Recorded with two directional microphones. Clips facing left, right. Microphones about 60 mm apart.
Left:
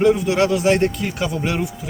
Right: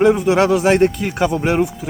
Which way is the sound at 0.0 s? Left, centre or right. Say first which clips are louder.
Right 3 dB; right.